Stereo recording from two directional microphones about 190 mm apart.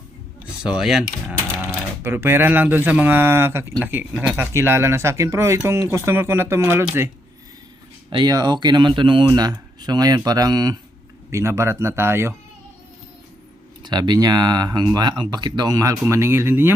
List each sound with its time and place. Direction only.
0.6 s speech: 5° right (ahead or behind)
8.1 s speech: 20° right (ahead or behind)
13.8 s speech: 20° right (ahead or behind)